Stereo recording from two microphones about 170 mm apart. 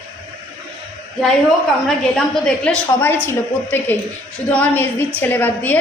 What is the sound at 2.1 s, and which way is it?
A woman's voice, 5° left (ahead or behind).